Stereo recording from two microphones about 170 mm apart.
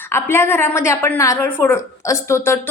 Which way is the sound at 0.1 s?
15° left (ahead or behind).